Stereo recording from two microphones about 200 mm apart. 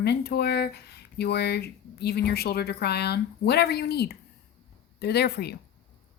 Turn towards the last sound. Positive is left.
turn(degrees=55)  # may be behind; listen again after turning